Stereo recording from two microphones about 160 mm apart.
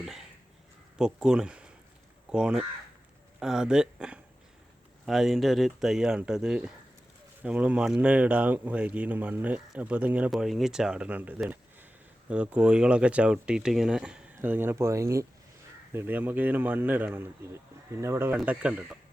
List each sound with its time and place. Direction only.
0.0 s speech: centre (ahead or behind)